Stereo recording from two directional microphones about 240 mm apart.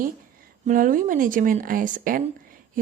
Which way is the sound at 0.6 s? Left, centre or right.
Right.